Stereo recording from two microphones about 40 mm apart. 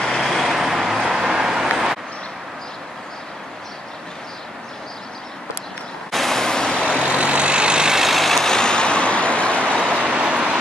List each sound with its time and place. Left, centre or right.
0.0 s vehicle: centre
0.3 s vehicle: centre
6.1 s a sound: centre
6.9 s vehicle: right
8.0 s vehicle: centre
8.5 s vehicle: left
10.2 s vehicle: right